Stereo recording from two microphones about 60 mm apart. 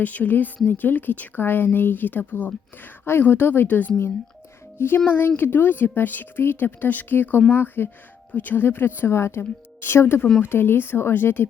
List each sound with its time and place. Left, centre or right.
0.0 s a woman's voice: left